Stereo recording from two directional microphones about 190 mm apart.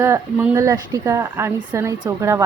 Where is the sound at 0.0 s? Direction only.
10° right (ahead or behind).